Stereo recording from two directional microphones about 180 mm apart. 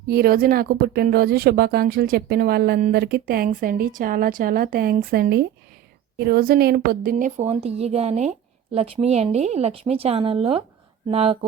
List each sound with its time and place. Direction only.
0.1 s a woman's voice: 55° right (ahead or behind); by 11.3 s 35° right (ahead or behind)